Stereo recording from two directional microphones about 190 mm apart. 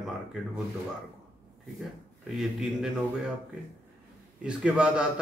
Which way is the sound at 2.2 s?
Centre (ahead or behind).